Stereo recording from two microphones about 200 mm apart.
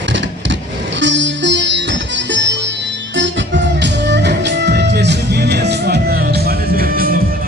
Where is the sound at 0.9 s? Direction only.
65° right (ahead or behind).